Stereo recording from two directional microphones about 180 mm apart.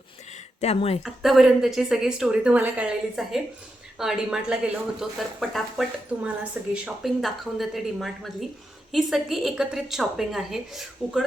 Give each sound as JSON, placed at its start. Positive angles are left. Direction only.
{"t": 0.6, "sound": "speech", "side_deg": 35}
{"t": 1.0, "sound": "speech", "side_deg": 0}